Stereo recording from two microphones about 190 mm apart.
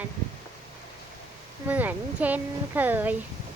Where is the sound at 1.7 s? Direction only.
10° right (ahead or behind).